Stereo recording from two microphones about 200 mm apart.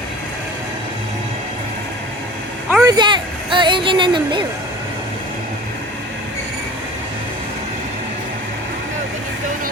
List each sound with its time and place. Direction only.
2.8 s speech: 20° right (ahead or behind)